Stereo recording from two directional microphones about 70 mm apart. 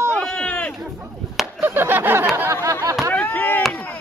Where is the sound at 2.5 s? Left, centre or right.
Right.